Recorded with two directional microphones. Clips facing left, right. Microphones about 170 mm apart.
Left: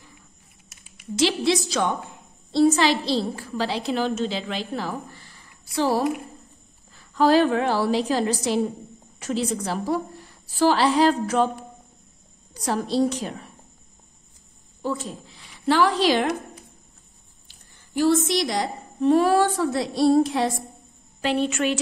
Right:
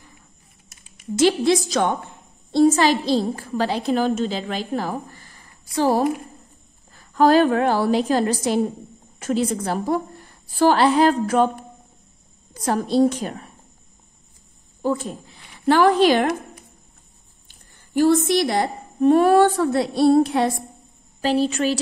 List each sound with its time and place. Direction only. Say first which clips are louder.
0.9 s a woman's voice: right 5 dB; 50° right (ahead or behind)
14.8 s a woman's voice: right 5 dB; 50° right (ahead or behind)
17.5 s a woman's voice: right 5 dB; 50° right (ahead or behind)
21.2 s a woman's voice: right 3 dB; 35° right (ahead or behind)